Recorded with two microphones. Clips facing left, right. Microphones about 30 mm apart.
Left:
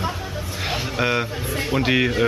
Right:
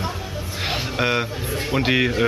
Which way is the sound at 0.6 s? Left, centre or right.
Centre.